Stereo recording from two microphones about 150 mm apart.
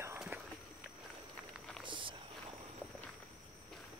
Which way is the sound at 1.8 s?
35° right (ahead or behind).